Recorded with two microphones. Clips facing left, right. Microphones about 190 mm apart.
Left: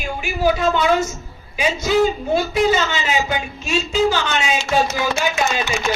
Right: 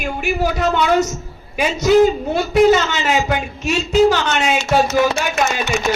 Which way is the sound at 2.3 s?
65° right (ahead or behind).